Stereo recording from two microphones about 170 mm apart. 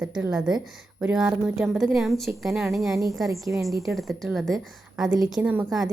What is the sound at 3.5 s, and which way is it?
Speech, 90° right.